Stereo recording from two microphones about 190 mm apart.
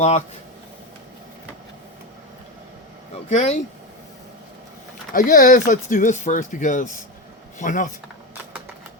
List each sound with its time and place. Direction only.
3.2 s speech: 35° left (ahead or behind)
5.1 s speech: 45° left (ahead or behind)